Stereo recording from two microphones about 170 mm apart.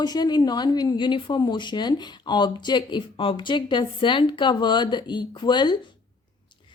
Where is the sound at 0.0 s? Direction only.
25° left (ahead or behind).